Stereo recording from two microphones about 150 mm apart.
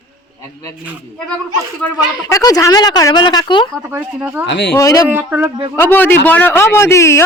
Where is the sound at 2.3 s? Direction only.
25° left (ahead or behind).